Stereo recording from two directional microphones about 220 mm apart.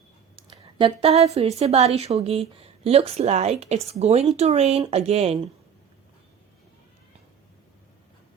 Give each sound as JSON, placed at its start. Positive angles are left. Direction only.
{"t": 0.3, "sound": "a woman's voice", "side_deg": -25}